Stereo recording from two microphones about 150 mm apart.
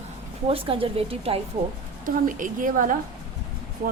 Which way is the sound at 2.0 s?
60° right (ahead or behind).